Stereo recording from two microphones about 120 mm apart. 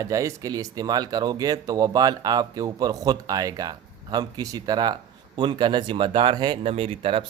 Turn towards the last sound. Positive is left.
turn(degrees=-50)  # may be behind; listen again after turning